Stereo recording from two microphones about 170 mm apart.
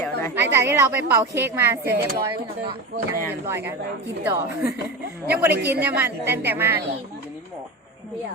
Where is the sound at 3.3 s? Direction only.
15° right (ahead or behind).